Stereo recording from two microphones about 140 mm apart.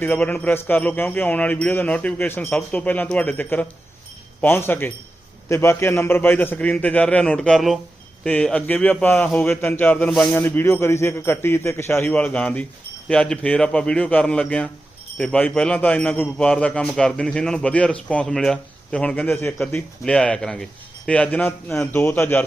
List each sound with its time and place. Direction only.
0.0 s a man's voice: 15° left (ahead or behind)